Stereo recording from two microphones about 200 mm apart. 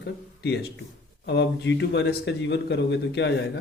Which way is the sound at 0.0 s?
55° left (ahead or behind).